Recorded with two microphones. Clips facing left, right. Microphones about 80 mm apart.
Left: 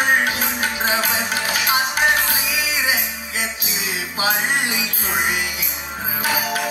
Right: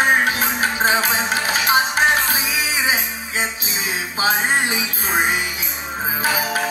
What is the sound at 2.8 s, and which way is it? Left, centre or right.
Music, right.